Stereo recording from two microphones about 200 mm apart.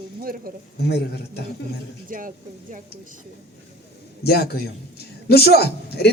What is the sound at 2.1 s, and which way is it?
Speech, 40° right (ahead or behind).